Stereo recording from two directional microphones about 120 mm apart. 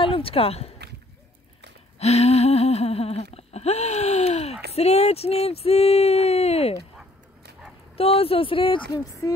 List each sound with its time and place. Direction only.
0.0 s speech: 50° left (ahead or behind)
2.0 s humming: 60° left (ahead or behind)
8.0 s speech: 55° left (ahead or behind)